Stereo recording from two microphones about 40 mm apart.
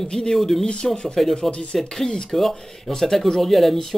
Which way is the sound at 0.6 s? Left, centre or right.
Left.